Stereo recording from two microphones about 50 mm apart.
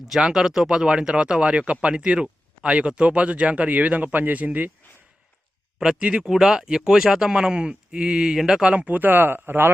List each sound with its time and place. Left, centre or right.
0.2 s speech: centre; by 4.7 s right
5.8 s speech: centre
8.6 s speech: right
9.0 s speech: right